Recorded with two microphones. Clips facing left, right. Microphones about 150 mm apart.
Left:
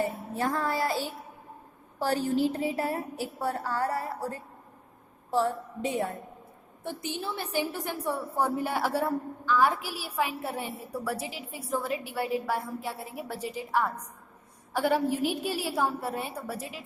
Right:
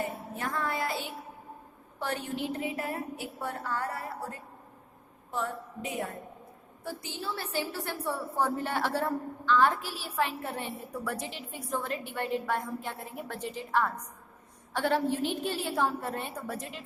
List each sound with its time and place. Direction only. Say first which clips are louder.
0.0 s a woman's voice: left 5 dB; 35° left (ahead or behind); by 16.8 s 5° left (ahead or behind)